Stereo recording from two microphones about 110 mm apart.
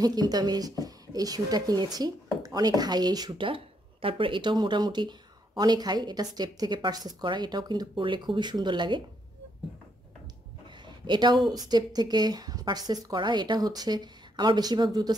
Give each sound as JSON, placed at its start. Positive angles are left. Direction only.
{"t": 0.0, "sound": "speech", "side_deg": -35}
{"t": 10.9, "sound": "a sound", "side_deg": -45}
{"t": 11.5, "sound": "speech", "side_deg": -35}